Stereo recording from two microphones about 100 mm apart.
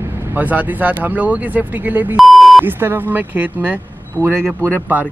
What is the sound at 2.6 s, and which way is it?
Speech, 20° right (ahead or behind).